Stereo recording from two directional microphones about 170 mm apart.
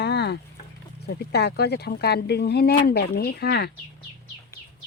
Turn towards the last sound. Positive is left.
turn(degrees=70)  # may be behind; listen again after turning